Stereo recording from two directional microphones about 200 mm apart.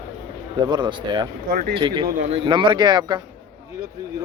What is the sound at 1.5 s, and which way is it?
Speech, 50° right (ahead or behind).